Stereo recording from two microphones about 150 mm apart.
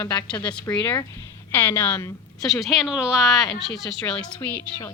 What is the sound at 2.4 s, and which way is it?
Speech, centre (ahead or behind).